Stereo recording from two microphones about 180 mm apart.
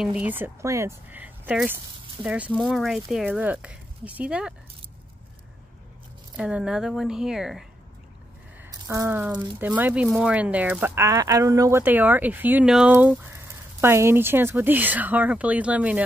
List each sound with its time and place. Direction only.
0.0 s speech: 5° right (ahead or behind)
6.3 s speech: 5° right (ahead or behind)
8.8 s speech: 15° right (ahead or behind)